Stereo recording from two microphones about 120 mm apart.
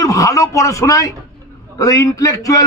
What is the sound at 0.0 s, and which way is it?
A man's voice, 25° left (ahead or behind).